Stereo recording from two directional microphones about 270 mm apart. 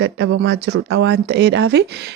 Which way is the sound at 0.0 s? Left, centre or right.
Right.